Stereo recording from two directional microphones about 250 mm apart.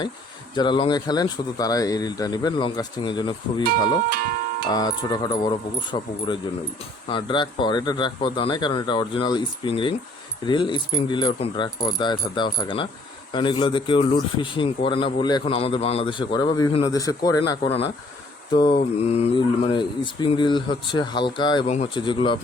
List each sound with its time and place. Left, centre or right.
0.5 s speech: centre
3.7 s speech: right
4.7 s a man's voice: centre